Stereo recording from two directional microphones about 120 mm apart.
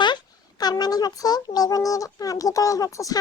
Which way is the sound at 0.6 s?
35° left (ahead or behind).